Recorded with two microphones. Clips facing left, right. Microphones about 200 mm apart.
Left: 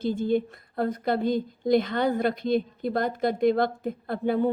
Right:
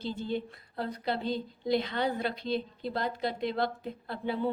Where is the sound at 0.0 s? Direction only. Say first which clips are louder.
Left 9 dB; 50° left (ahead or behind).